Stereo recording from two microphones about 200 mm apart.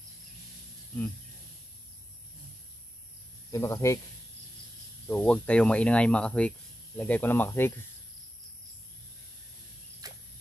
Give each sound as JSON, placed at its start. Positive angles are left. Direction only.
{"t": 3.5, "sound": "speech", "side_deg": 15}
{"t": 5.0, "sound": "speech", "side_deg": 5}
{"t": 10.0, "sound": "cricket", "side_deg": -20}